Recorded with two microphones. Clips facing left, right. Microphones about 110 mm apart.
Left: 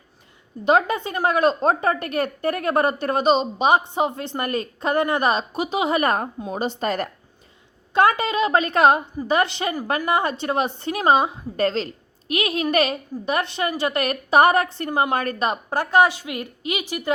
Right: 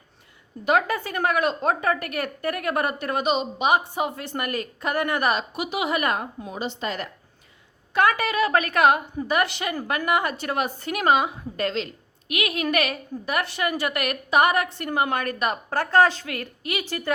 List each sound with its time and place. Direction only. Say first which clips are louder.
0.6 s a woman's voice: left 3 dB; 25° left (ahead or behind); by 7.1 s 45° left (ahead or behind)
7.9 s a woman's voice: left 3 dB; 25° left (ahead or behind)
15.7 s speech: left 1 dB; 15° left (ahead or behind)